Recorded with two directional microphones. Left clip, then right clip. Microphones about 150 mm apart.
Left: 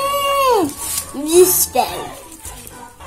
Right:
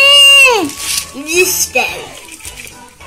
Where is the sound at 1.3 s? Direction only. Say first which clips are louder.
Left 1 dB; 85° left.